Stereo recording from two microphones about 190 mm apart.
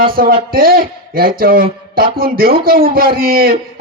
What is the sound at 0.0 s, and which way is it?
A man's voice, 50° right (ahead or behind).